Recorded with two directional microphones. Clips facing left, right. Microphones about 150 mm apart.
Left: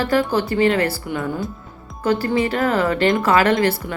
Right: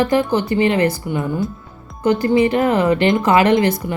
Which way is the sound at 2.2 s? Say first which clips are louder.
Right 5 dB; 20° right (ahead or behind).